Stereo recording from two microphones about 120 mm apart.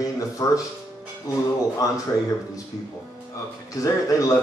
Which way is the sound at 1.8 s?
30° left (ahead or behind).